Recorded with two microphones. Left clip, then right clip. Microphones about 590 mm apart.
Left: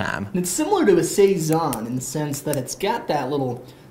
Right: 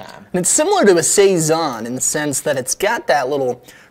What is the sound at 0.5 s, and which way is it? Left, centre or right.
A woman's voice, right.